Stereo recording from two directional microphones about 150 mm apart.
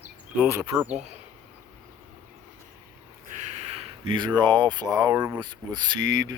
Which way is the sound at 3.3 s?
50° right (ahead or behind).